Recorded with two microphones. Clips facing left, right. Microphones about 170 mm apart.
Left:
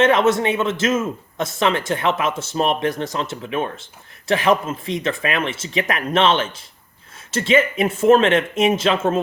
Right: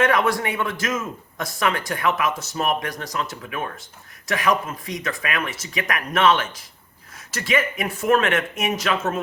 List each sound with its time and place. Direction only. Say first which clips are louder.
0.0 s a man's voice: left 5 dB; 25° left (ahead or behind)